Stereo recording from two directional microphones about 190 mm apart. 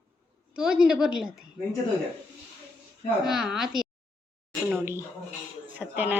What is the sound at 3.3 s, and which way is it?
Speech, centre (ahead or behind).